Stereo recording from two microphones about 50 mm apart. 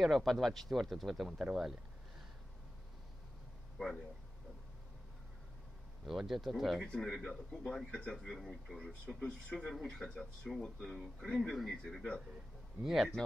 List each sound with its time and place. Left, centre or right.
0.0 s speech: centre
3.7 s speech: centre
6.0 s speech: centre
6.8 s speech: centre
8.2 s speech: centre
9.1 s speech: left
9.8 s speech: centre
11.1 s speech: centre
12.8 s speech: centre